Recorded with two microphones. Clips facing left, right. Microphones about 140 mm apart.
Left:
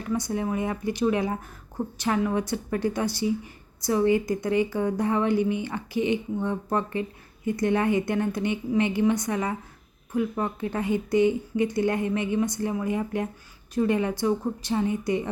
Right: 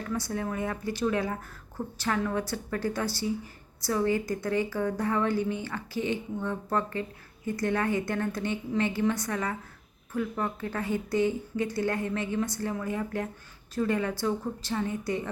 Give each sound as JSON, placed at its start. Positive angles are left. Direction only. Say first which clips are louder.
{"t": 0.0, "sound": "a woman's voice", "louder": "left 4 dB", "side_deg": 20}